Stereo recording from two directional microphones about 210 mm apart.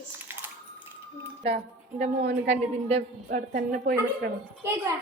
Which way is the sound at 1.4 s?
30° right (ahead or behind).